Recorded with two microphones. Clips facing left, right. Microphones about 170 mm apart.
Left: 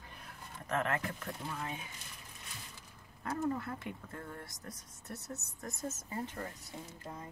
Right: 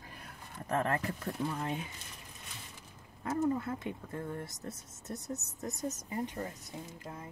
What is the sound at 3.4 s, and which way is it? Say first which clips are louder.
Speech: right 5 dB; 20° right (ahead or behind).